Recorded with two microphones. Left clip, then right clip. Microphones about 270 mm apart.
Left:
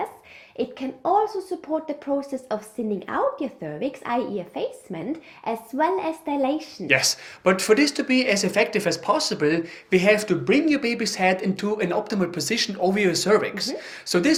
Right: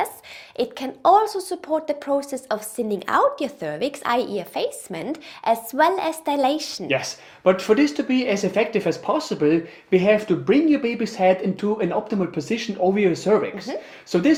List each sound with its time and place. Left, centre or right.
0.5 s a woman's voice: right
6.8 s speech: left